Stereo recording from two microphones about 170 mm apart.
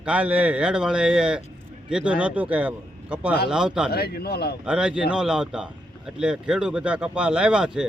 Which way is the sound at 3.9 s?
65° left (ahead or behind).